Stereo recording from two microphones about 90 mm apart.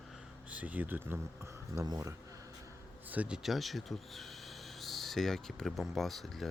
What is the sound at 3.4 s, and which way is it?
Speech, centre (ahead or behind).